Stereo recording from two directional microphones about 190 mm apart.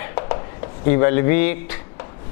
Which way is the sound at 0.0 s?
15° left (ahead or behind).